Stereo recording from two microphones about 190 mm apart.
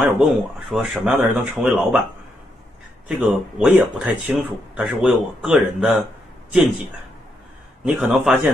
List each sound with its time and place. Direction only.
0.0 s speech: 5° right (ahead or behind)
3.1 s speech: 5° right (ahead or behind)
7.8 s speech: 5° right (ahead or behind)